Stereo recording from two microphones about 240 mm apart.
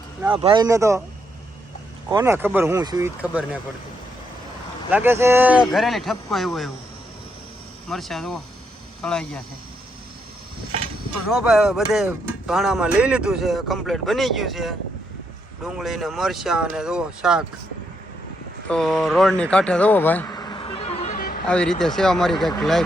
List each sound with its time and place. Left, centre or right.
0.3 s speech: centre
2.0 s speech: centre
4.9 s speech: centre
7.9 s speech: centre
11.3 s speech: centre
18.7 s speech: centre; by 21.4 s left
21.4 s speech: centre